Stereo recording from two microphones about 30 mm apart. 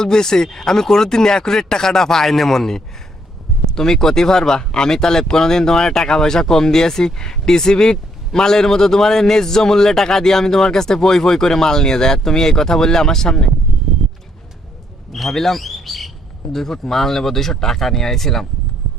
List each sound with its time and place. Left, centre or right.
0.0 s speech: left
15.1 s speech: centre
15.6 s bird: centre
16.6 s speech: centre